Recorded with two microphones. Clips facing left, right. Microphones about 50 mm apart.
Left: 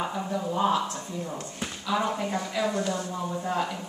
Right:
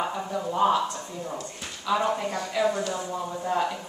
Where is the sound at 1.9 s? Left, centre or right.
Centre.